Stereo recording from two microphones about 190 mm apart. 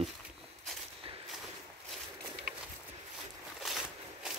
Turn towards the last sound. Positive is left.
turn(degrees=0)  # may be behind; listen again after turning